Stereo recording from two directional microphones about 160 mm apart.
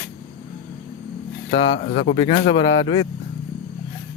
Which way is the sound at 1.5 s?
40° left (ahead or behind).